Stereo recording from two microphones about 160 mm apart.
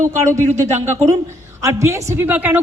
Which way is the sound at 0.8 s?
15° right (ahead or behind).